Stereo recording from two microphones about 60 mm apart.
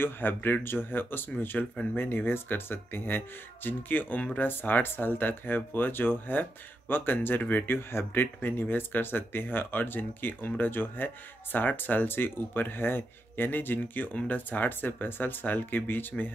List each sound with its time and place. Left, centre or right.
0.0 s speech: left